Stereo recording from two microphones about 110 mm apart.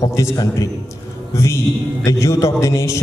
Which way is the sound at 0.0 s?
25° left (ahead or behind).